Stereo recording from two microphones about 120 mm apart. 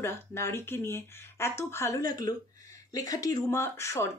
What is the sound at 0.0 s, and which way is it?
Speech, 20° left (ahead or behind).